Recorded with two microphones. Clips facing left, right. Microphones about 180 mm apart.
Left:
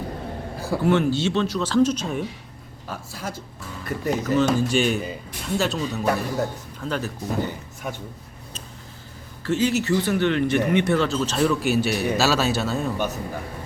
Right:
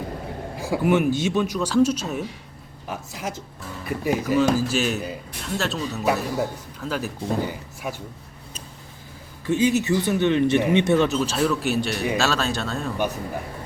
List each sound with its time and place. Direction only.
0.6 s speech: 15° right (ahead or behind)
2.8 s a man's voice: 20° right (ahead or behind)
3.8 s speech: 10° right (ahead or behind)
9.4 s speech: 15° right (ahead or behind); by 12.9 s 5° left (ahead or behind)